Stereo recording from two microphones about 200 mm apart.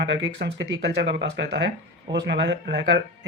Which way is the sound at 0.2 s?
60° right (ahead or behind).